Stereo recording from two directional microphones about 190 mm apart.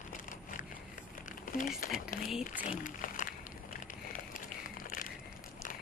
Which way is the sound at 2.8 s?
45° left (ahead or behind).